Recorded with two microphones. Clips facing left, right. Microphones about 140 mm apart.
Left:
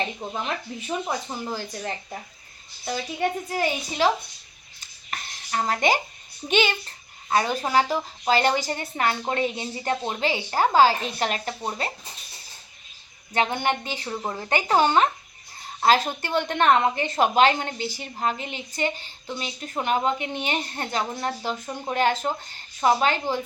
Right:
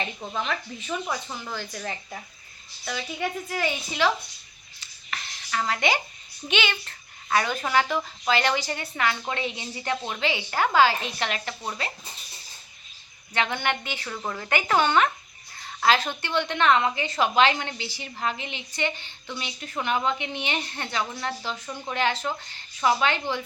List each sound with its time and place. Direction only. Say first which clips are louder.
0.2 s speech: even; 25° left (ahead or behind)
4.0 s a woman's voice: left 2 dB; 40° left (ahead or behind)
4.8 s a sound: left 1 dB; 45° left (ahead or behind)
6.5 s a woman's voice: left 5 dB; 40° left (ahead or behind)
6.8 s a woman's voice: left 1 dB; 30° left (ahead or behind)
13.3 s a woman's voice: left 3 dB; 40° left (ahead or behind)